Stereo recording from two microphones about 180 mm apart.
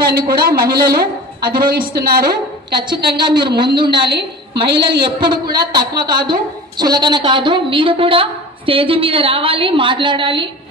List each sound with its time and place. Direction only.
0.0 s a woman's voice: 55° right (ahead or behind)
2.8 s a woman's voice: 25° right (ahead or behind)